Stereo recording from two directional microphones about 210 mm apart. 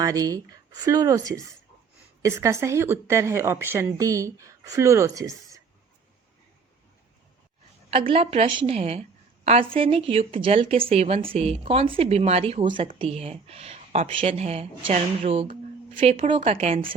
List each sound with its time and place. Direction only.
0.0 s a woman's voice: 15° right (ahead or behind)
7.9 s a woman's voice: 25° right (ahead or behind)